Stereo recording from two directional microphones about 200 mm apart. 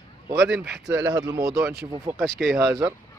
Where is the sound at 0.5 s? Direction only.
5° right (ahead or behind).